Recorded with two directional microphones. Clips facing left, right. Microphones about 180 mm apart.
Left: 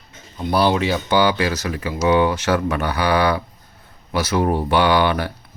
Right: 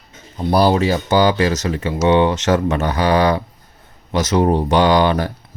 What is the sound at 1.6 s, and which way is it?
Speech, 25° right (ahead or behind).